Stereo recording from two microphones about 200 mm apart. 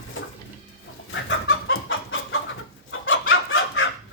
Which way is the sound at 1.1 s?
75° left (ahead or behind).